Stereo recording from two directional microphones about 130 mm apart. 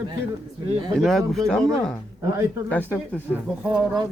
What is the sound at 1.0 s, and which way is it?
Speech, centre (ahead or behind).